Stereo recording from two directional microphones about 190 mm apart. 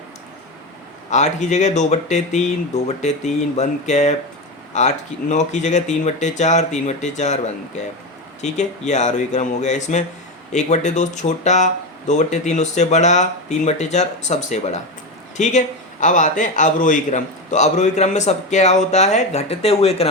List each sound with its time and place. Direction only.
1.1 s a man's voice: 40° left (ahead or behind)